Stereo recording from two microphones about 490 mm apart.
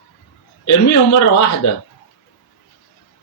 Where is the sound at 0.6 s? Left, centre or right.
Left.